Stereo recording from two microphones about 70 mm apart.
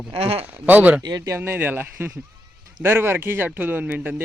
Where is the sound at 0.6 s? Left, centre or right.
Right.